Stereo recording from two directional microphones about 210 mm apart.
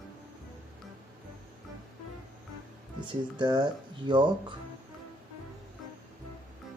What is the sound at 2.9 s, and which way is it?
Speech, 20° right (ahead or behind).